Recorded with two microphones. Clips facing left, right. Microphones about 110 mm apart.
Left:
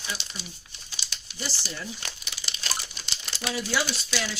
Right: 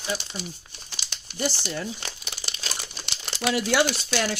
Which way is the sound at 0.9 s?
60° right (ahead or behind).